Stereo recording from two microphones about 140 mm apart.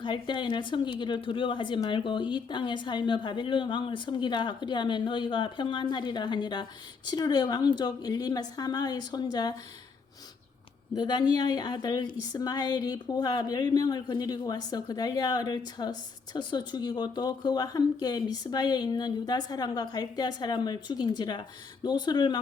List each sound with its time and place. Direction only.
0.0 s a woman's voice: 35° left (ahead or behind)
10.9 s a woman's voice: 30° left (ahead or behind)